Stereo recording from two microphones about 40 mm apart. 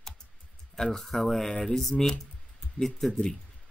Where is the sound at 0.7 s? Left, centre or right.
Centre.